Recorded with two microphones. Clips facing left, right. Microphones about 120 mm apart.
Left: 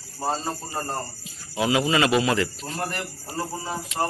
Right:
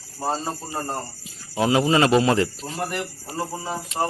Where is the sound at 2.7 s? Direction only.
10° right (ahead or behind).